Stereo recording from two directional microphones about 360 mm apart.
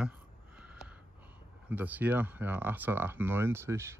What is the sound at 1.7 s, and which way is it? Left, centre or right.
Speech, centre.